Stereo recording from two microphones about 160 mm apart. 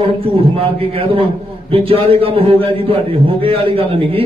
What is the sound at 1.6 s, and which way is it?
A man's voice, 35° right (ahead or behind).